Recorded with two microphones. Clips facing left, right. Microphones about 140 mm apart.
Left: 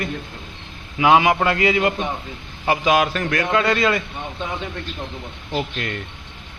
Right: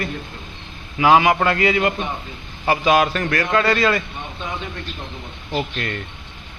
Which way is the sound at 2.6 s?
10° left (ahead or behind).